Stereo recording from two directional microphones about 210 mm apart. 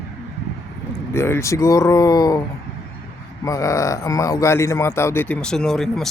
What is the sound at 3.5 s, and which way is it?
Speech, 15° left (ahead or behind).